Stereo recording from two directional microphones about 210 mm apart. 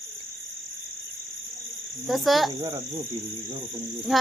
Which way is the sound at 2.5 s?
20° right (ahead or behind).